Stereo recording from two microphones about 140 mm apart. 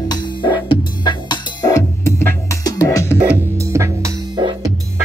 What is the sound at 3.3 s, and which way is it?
Music, 20° right (ahead or behind).